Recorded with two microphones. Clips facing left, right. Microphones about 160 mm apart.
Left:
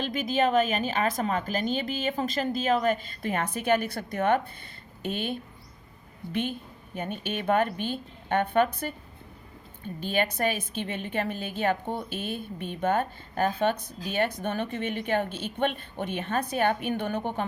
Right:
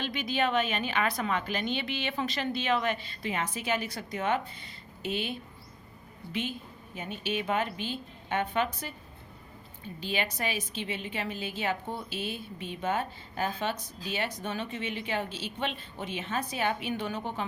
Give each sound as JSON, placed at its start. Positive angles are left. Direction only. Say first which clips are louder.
{"t": 0.0, "sound": "a woman's voice", "louder": "left 4 dB", "side_deg": 45}
{"t": 6.9, "sound": "a woman's voice", "louder": "left 2 dB", "side_deg": 55}
{"t": 10.0, "sound": "a woman's voice", "louder": "left 6 dB", "side_deg": 50}